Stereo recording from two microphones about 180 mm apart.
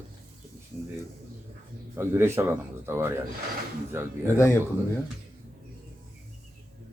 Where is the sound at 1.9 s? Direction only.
15° right (ahead or behind).